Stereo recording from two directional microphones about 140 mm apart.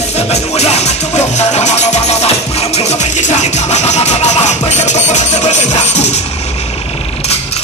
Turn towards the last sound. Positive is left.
turn(degrees=55)  # may be behind; listen again after turning